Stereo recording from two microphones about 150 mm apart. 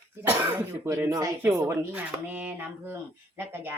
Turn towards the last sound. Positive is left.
turn(degrees=-15)  # may be behind; listen again after turning